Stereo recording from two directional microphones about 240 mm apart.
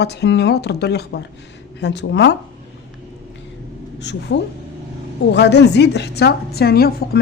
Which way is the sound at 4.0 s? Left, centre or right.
Left.